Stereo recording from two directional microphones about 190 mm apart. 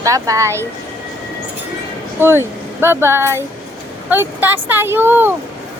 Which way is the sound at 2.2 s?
10° right (ahead or behind).